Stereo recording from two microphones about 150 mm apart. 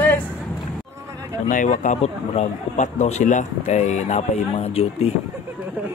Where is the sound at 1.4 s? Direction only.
55° left (ahead or behind).